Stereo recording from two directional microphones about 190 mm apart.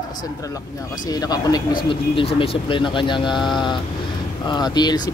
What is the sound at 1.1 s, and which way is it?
Speech, 20° left (ahead or behind).